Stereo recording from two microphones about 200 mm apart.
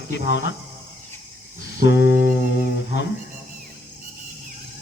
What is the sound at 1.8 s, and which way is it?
Humming, 60° left (ahead or behind).